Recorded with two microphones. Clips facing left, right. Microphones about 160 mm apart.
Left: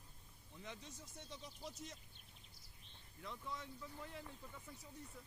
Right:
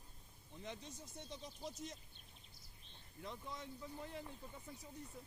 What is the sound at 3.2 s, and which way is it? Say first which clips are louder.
Speech: even; 25° right (ahead or behind).